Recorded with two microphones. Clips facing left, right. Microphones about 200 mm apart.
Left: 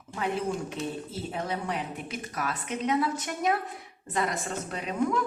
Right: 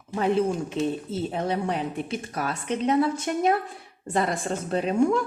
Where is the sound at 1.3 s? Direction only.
25° right (ahead or behind).